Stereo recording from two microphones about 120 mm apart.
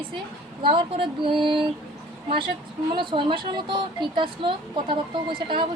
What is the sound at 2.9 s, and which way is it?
A woman's voice, 45° right (ahead or behind).